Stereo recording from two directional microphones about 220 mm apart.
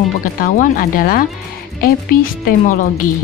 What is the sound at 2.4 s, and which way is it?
Speech, 35° left (ahead or behind).